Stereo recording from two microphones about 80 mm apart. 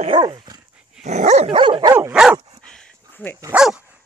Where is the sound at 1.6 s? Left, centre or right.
Right.